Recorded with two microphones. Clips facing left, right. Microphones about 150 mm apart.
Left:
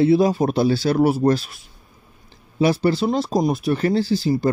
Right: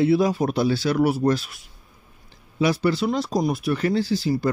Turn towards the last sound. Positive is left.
turn(degrees=25)  # may be behind; listen again after turning